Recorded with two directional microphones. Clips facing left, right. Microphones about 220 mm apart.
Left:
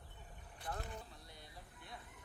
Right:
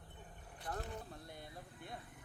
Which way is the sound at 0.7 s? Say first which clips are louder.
Right 2 dB; 55° right (ahead or behind).